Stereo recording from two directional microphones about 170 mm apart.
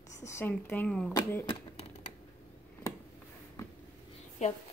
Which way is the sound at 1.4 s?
30° left (ahead or behind).